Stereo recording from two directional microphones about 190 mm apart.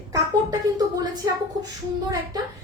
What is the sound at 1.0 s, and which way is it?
Speech, 20° right (ahead or behind).